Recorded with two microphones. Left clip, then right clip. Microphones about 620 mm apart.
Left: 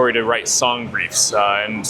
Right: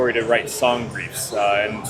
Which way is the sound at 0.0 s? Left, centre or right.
Left.